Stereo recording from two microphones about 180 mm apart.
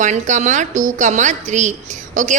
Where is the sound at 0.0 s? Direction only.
40° right (ahead or behind).